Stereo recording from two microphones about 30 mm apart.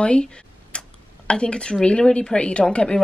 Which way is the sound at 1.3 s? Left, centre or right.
Left.